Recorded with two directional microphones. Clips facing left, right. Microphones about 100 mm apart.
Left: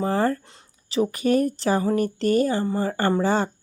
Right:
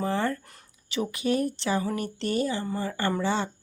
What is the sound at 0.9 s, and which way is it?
Speech, 40° left (ahead or behind).